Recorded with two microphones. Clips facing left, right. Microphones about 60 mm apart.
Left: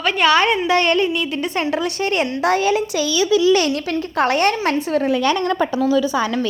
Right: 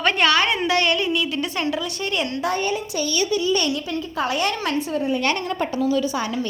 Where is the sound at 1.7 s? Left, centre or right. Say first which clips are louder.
Left 5 dB; left.